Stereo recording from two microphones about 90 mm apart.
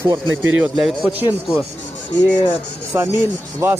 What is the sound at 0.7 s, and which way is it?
Speech, 5° right (ahead or behind).